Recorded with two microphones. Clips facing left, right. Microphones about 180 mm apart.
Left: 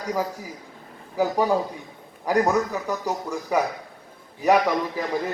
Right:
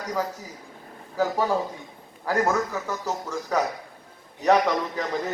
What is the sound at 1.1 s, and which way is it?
A man's voice, 15° left (ahead or behind).